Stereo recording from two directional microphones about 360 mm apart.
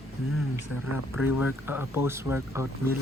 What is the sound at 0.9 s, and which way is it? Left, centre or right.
Speech, centre.